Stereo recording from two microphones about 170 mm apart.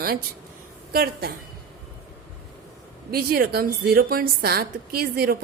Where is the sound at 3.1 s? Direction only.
60° right (ahead or behind).